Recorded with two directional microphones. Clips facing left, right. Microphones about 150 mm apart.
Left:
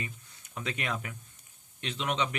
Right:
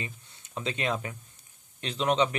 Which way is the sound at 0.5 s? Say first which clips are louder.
Right 4 dB; 25° right (ahead or behind).